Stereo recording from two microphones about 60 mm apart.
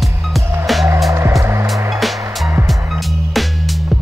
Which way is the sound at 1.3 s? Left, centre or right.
Right.